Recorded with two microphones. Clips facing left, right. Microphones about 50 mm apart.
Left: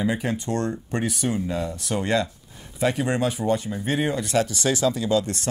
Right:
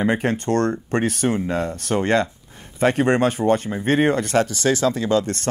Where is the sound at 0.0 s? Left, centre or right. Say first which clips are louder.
Right 5 dB; right.